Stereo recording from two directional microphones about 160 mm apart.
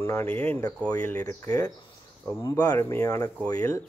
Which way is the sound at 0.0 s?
15° left (ahead or behind).